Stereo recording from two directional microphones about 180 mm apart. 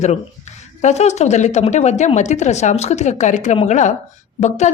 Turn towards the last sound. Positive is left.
turn(degrees=40)  # may be behind; listen again after turning